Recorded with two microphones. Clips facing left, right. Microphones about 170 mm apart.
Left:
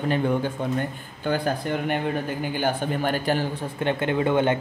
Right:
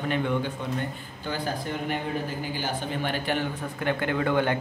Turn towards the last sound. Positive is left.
turn(degrees=20)  # may be behind; listen again after turning